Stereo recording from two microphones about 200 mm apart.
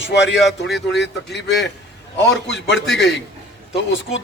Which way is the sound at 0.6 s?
Centre (ahead or behind).